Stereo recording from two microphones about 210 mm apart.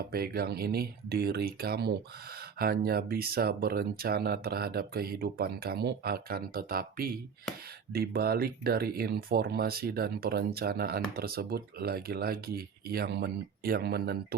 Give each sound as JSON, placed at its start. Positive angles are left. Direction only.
{"t": 0.0, "sound": "speech", "side_deg": -45}